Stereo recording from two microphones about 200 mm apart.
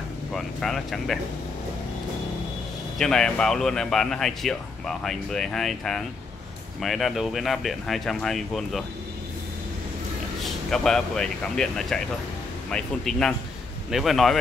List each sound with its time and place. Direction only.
0.3 s a man's voice: centre (ahead or behind)
3.0 s a man's voice: 5° left (ahead or behind)
10.4 s a man's voice: centre (ahead or behind)